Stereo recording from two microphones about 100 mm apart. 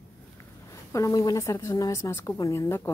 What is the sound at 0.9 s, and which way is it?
A woman's voice, 35° left (ahead or behind).